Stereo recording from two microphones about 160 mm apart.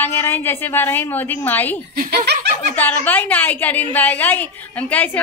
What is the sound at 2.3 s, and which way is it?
Speech, 90° right.